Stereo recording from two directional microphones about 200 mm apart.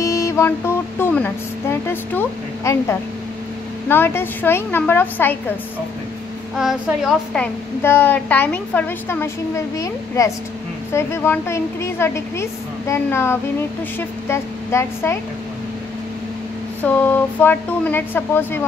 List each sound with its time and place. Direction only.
0.0 s a woman's voice: 15° left (ahead or behind)
6.5 s a woman's voice: centre (ahead or behind)
7.8 s a woman's voice: 10° left (ahead or behind)
16.8 s a woman's voice: 10° left (ahead or behind)